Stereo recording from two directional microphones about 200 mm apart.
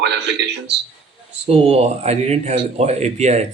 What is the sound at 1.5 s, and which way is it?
Speech, 30° right (ahead or behind).